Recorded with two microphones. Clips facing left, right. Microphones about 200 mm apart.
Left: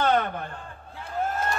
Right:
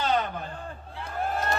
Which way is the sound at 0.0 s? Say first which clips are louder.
Left 3 dB; 60° left (ahead or behind).